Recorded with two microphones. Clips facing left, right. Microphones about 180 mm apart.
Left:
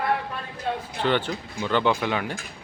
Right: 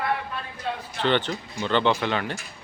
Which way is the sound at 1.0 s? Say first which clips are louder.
Right 1 dB; 10° left (ahead or behind).